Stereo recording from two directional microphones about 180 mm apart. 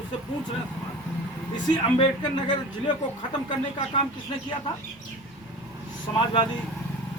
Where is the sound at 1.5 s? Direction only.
25° left (ahead or behind).